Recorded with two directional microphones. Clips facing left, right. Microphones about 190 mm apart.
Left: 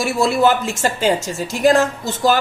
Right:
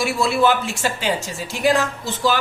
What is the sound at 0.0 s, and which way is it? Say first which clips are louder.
Speech: left 3 dB; 40° left (ahead or behind).